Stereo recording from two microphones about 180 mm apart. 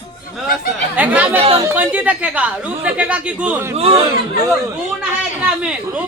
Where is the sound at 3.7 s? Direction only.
35° right (ahead or behind).